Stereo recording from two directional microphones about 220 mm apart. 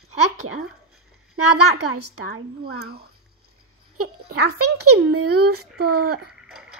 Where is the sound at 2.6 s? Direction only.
45° right (ahead or behind).